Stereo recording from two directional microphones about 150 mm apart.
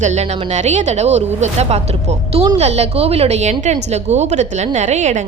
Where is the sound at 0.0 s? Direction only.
50° right (ahead or behind).